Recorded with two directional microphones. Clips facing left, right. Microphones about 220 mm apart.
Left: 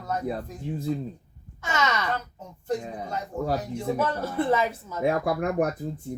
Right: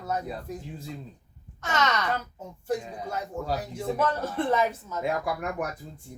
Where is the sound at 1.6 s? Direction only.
10° left (ahead or behind).